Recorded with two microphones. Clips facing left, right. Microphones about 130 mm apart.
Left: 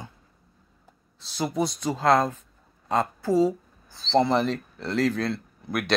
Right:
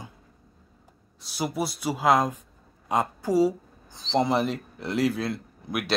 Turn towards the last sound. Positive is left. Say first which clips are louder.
# left 2 dB
turn(degrees=-10)  # may be behind; listen again after turning